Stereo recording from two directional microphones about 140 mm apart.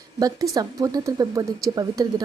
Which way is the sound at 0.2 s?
25° right (ahead or behind).